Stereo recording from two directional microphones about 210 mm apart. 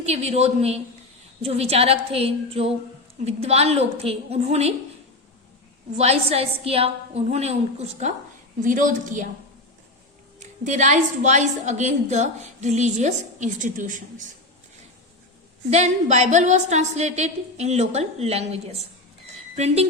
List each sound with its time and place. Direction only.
0.0 s a woman's voice: 30° right (ahead or behind)
6.0 s a woman's voice: 30° right (ahead or behind)
10.4 s a woman's voice: 35° right (ahead or behind)
15.7 s a woman's voice: 30° right (ahead or behind)